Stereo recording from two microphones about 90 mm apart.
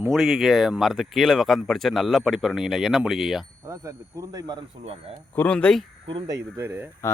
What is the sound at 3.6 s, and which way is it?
Speech, 35° right (ahead or behind).